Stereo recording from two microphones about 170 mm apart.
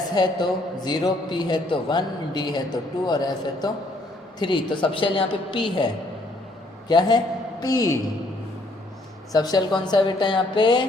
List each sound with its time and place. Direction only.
0.1 s a man's voice: 25° left (ahead or behind)
9.3 s a man's voice: 25° left (ahead or behind)